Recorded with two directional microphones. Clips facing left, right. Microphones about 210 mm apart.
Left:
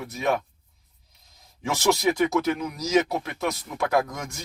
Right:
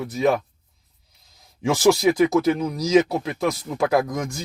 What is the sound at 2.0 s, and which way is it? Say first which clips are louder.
Speech: right 5 dB; 35° right (ahead or behind).